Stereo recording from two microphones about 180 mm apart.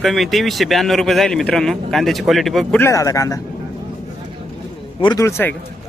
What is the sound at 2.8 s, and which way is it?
Speech, 15° left (ahead or behind).